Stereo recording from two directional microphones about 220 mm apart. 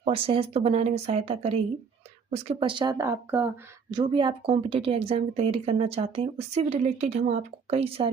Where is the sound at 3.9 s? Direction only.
20° right (ahead or behind).